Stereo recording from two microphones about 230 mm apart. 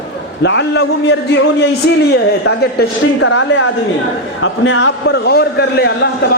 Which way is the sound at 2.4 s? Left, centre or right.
Left.